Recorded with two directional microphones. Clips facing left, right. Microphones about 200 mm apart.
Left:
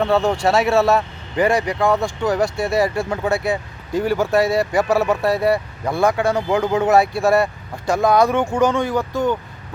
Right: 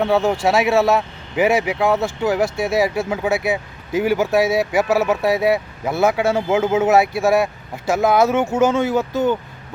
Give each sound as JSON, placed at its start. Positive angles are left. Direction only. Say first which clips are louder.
{"t": 0.0, "sound": "speech", "louder": "even", "side_deg": 0}